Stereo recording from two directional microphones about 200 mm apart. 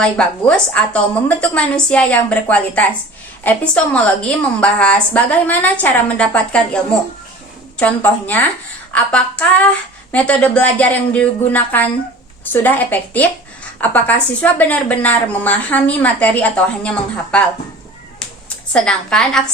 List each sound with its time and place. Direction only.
0.0 s a woman's voice: 5° left (ahead or behind)
7.8 s a woman's voice: 5° left (ahead or behind)
18.2 s a sound: 5° left (ahead or behind)